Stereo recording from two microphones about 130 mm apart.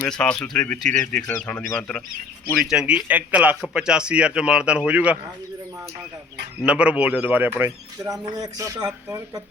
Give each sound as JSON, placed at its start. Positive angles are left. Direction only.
{"t": 0.0, "sound": "speech", "side_deg": 10}
{"t": 2.6, "sound": "a man's voice", "side_deg": -5}
{"t": 6.7, "sound": "a man's voice", "side_deg": -10}